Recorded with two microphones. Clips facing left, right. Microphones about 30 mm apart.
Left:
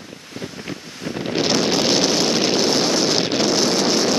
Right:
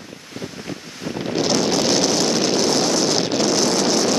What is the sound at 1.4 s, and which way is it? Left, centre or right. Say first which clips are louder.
Vehicle: even; centre.